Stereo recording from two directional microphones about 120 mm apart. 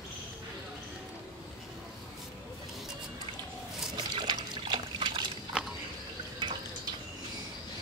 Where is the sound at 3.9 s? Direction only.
40° right (ahead or behind).